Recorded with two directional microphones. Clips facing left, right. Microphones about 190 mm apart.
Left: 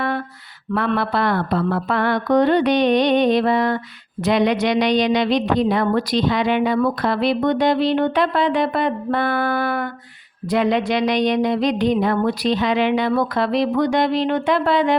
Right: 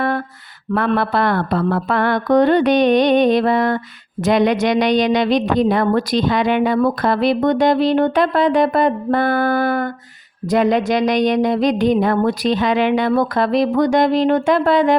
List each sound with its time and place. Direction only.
0.7 s speech: 50° right (ahead or behind)